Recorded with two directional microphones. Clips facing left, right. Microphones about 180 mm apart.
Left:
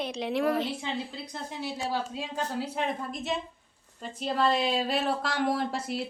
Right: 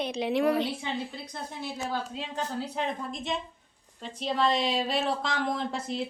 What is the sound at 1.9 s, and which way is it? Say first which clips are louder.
A woman's voice: left 2 dB; 10° left (ahead or behind).